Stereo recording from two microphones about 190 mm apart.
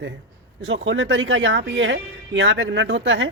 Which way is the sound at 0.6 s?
80° right.